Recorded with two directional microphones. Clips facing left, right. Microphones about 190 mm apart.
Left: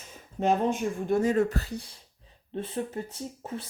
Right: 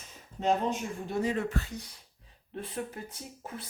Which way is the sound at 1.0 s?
45° left (ahead or behind).